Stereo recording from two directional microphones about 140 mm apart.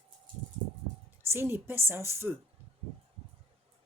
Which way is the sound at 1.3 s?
15° right (ahead or behind).